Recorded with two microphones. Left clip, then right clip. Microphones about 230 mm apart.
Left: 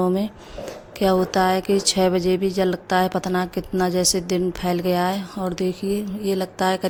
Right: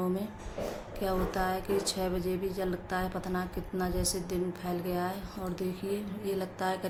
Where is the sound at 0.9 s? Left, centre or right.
Left.